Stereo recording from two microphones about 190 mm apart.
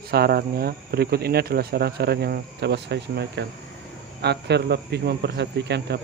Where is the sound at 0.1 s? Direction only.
55° right (ahead or behind).